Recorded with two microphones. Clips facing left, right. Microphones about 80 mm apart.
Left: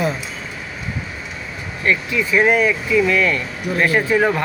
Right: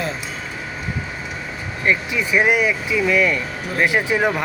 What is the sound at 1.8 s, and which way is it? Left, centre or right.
Speech, centre.